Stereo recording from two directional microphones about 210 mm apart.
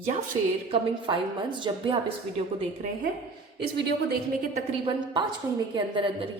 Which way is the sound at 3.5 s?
55° right (ahead or behind).